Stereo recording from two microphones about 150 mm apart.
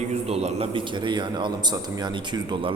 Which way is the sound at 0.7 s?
30° right (ahead or behind).